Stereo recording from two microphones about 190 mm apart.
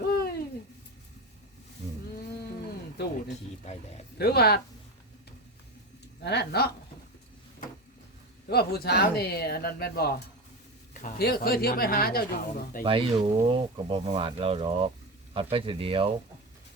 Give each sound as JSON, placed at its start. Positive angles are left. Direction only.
{"t": 0.0, "sound": "a sound", "side_deg": 55}
{"t": 3.2, "sound": "speech", "side_deg": 35}
{"t": 4.2, "sound": "speech", "side_deg": 55}
{"t": 6.2, "sound": "speech", "side_deg": 60}
{"t": 8.4, "sound": "speech", "side_deg": 55}
{"t": 12.8, "sound": "speech", "side_deg": -30}